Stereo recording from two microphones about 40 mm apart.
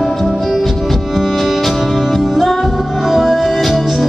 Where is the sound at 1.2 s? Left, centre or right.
Centre.